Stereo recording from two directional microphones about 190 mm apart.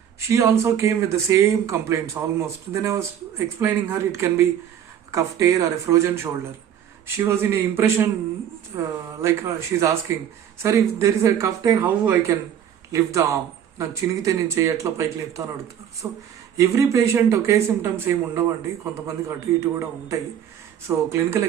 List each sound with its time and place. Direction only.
0.2 s speech: 15° right (ahead or behind)
7.2 s speech: 10° right (ahead or behind)